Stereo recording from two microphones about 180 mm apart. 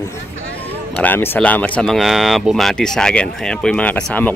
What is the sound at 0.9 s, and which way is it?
Speech, 10° left (ahead or behind).